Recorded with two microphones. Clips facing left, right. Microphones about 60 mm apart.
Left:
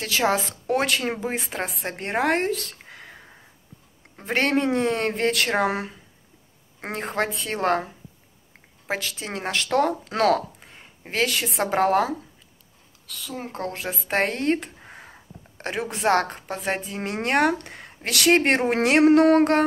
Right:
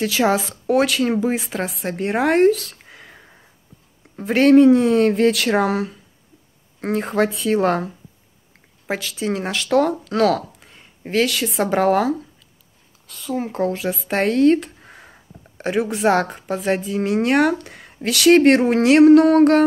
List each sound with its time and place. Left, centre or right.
0.0 s speech: centre
1.2 s speech: centre
4.2 s speech: centre
5.7 s speech: centre
7.0 s speech: centre
8.8 s speech: centre
10.0 s speech: centre
13.4 s speech: centre
18.9 s speech: centre